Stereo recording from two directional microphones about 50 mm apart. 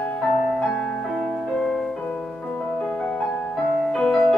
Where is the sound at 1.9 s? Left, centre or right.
Centre.